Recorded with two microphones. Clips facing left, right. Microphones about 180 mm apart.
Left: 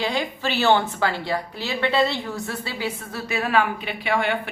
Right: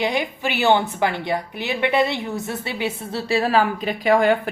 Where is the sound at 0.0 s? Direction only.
15° right (ahead or behind).